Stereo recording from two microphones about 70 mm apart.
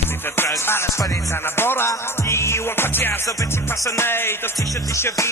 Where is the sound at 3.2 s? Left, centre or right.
Left.